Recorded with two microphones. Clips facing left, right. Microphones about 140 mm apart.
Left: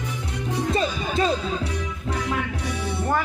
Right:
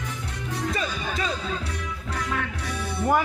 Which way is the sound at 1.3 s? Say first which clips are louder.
Left 5 dB; 10° left (ahead or behind).